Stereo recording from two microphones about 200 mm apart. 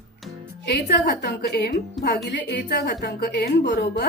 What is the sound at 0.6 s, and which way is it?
A woman's voice, 60° left (ahead or behind).